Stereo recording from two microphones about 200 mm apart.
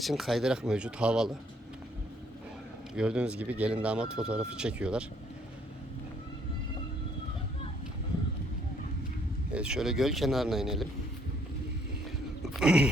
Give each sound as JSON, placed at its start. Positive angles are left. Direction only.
{"t": 0.0, "sound": "speech", "side_deg": 0}
{"t": 2.9, "sound": "speech", "side_deg": -5}
{"t": 9.5, "sound": "speech", "side_deg": -5}
{"t": 12.4, "sound": "a sound", "side_deg": -5}